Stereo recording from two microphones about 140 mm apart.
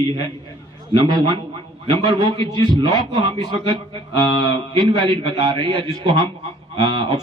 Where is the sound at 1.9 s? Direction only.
35° right (ahead or behind).